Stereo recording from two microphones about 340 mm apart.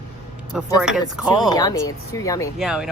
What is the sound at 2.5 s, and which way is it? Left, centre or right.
Speech, centre.